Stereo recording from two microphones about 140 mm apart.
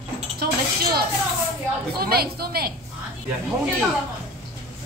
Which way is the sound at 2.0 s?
90° right.